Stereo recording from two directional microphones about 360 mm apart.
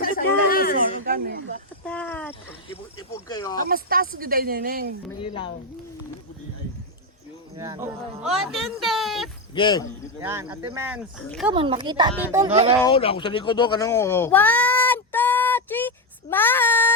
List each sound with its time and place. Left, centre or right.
0.0 s chatter: left
1.1 s speech: right
1.8 s a sound: centre
3.2 s speech: centre
3.6 s speech: right
5.2 s speech: centre
7.6 s speech: centre
9.6 s speech: centre
10.2 s speech: centre
11.5 s a woman's voice: centre
12.8 s speech: centre